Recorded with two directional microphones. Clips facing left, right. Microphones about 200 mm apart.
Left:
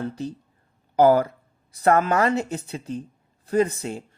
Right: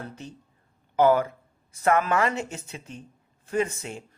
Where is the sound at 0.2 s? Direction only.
35° left (ahead or behind).